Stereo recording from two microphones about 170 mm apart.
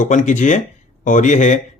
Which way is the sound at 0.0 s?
45° left (ahead or behind).